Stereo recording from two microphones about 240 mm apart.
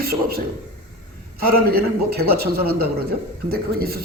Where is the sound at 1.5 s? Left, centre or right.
Right.